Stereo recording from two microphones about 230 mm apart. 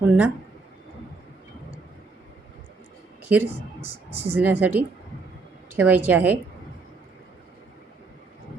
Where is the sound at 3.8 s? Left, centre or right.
Left.